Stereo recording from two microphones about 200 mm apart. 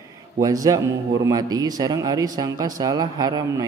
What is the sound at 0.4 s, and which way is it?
A man's voice, 15° right (ahead or behind).